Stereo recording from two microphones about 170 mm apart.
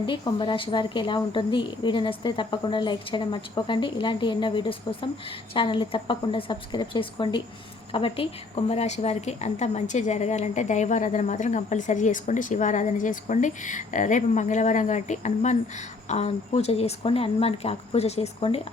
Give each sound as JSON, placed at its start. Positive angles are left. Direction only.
{"t": 0.0, "sound": "a woman's voice", "side_deg": 30}